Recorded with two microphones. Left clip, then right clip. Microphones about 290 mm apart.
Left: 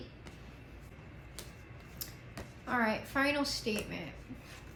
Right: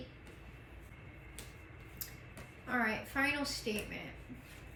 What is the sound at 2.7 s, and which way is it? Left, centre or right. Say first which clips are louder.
A woman's voice: left 3 dB; centre.